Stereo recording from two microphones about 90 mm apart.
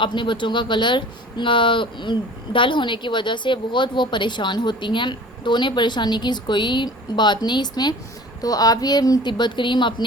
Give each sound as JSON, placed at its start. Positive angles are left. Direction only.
{"t": 0.0, "sound": "speech", "side_deg": 60}
{"t": 8.4, "sound": "speech", "side_deg": 40}